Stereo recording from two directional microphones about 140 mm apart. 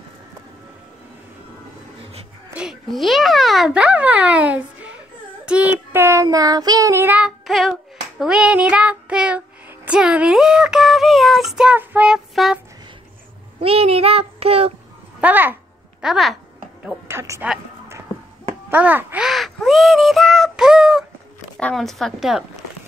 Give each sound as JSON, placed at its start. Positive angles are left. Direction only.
{"t": 2.5, "sound": "a child's voice", "side_deg": -5}
{"t": 6.2, "sound": "child singing", "side_deg": -25}
{"t": 9.8, "sound": "speech", "side_deg": -5}
{"t": 13.6, "sound": "child singing", "side_deg": -45}
{"t": 15.1, "sound": "a child's voice", "side_deg": -10}
{"t": 16.8, "sound": "child singing", "side_deg": -20}
{"t": 18.7, "sound": "crow", "side_deg": -10}
{"t": 21.5, "sound": "a woman's voice", "side_deg": 5}